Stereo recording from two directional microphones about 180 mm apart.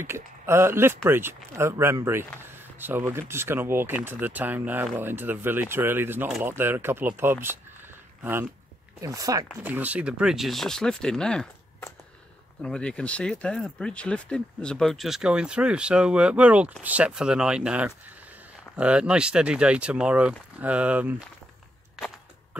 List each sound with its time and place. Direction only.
0.0 s speech: 15° right (ahead or behind)
21.9 s walk: centre (ahead or behind)